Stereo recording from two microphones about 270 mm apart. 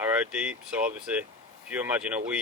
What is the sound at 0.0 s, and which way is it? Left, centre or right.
Speech, centre.